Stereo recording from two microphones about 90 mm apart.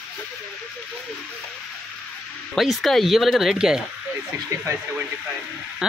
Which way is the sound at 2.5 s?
Centre (ahead or behind).